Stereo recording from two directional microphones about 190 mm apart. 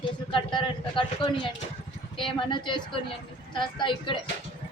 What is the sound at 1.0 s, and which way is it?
Speech, 25° left (ahead or behind).